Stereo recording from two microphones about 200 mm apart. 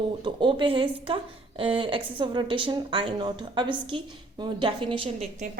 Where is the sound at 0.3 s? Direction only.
25° right (ahead or behind).